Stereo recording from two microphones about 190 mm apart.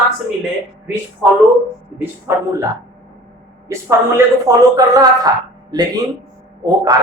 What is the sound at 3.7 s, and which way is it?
Speech, 15° right (ahead or behind).